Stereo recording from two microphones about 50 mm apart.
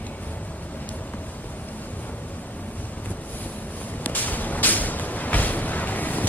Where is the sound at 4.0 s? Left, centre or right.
Left.